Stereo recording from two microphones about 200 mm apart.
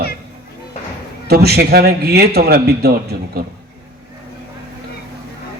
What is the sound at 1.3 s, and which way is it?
A man's voice, 50° right (ahead or behind).